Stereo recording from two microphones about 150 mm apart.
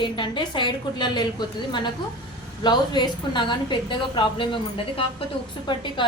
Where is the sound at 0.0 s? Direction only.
30° left (ahead or behind).